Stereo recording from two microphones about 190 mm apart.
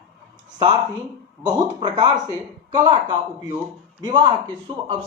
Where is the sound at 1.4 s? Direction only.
25° right (ahead or behind).